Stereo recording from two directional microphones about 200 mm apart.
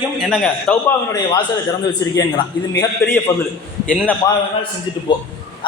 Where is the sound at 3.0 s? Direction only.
15° left (ahead or behind).